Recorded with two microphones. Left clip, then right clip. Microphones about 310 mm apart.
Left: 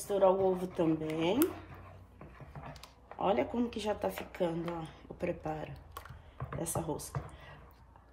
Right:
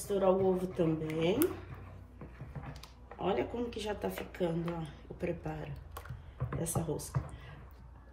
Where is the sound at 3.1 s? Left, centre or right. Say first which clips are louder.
Left 3 dB; centre.